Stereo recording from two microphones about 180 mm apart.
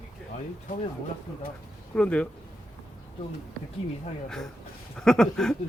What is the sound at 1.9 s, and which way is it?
Speech, 5° left (ahead or behind).